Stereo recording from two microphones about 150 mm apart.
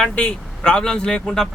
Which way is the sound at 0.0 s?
10° left (ahead or behind).